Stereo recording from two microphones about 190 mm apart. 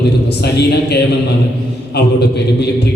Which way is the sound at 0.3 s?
60° left (ahead or behind).